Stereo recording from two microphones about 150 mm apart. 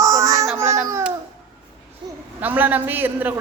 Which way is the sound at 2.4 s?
10° right (ahead or behind).